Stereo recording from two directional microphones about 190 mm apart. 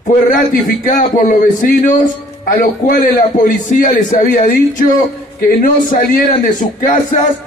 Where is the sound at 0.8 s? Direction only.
45° left (ahead or behind).